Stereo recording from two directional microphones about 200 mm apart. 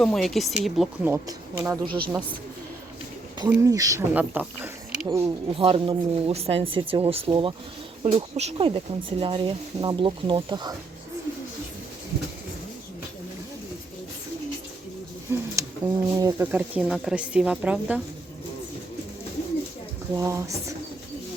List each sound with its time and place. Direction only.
0.0 s speech: centre (ahead or behind)
1.1 s speech: 15° right (ahead or behind)
3.5 s speech: 15° right (ahead or behind)
5.5 s speech: 25° right (ahead or behind)
15.3 s speech: 15° right (ahead or behind)
20.1 s speech: 15° right (ahead or behind)